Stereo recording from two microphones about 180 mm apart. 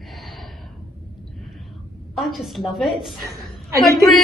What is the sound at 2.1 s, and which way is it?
A woman's voice, centre (ahead or behind).